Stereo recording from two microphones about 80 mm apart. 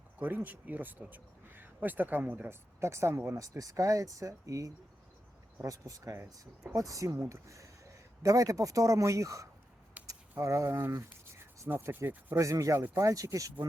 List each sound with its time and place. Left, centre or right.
0.2 s speech: right
3.3 s speech: right
10.0 s a sound: centre
10.4 s speech: right
12.4 s speech: right